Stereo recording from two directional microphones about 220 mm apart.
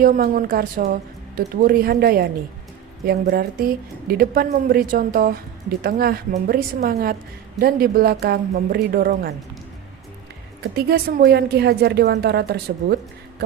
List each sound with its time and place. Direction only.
0.0 s a woman's voice: 40° right (ahead or behind)
10.6 s speech: 45° right (ahead or behind)